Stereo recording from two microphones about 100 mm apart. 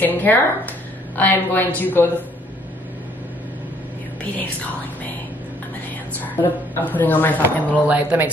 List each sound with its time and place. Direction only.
0.0 s a woman's voice: 20° left (ahead or behind)
6.2 s speech: 20° left (ahead or behind)
7.8 s speech: 15° right (ahead or behind)